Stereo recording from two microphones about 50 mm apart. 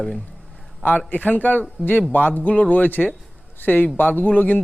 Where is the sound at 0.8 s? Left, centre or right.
Left.